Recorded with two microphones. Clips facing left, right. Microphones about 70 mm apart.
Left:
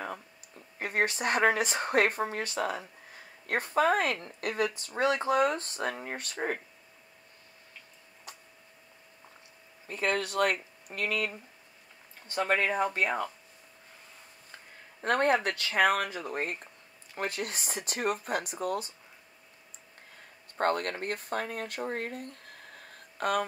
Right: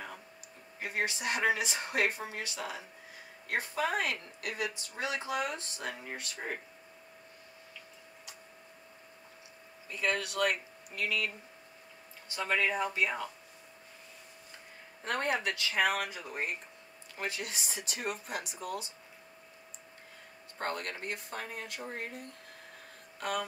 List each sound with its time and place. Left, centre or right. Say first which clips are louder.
0.7 s speech: left 5 dB; left
9.8 s speech: left 3 dB; left
15.0 s speech: left 7 dB; left
20.5 s speech: left 8 dB; left